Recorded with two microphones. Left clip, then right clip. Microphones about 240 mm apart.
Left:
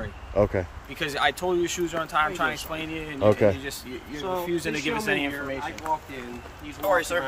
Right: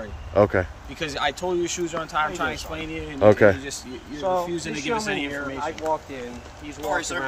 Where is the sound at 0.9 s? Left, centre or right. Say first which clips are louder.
Left 1 dB; centre.